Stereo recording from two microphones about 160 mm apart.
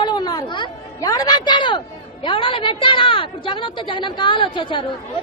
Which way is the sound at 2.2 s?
30° left (ahead or behind).